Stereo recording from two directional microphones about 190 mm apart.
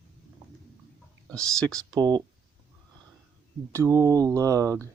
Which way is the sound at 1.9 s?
25° right (ahead or behind).